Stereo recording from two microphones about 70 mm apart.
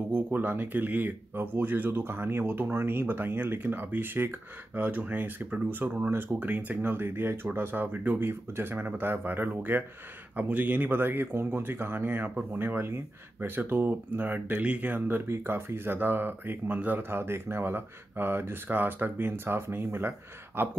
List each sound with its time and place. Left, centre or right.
0.1 s speech: right